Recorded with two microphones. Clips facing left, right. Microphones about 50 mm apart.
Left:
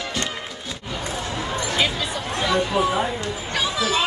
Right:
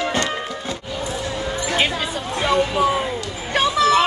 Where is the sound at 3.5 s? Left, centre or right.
Right.